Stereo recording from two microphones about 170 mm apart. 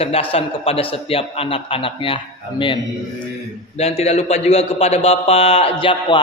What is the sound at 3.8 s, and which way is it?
Mantra, 35° left (ahead or behind).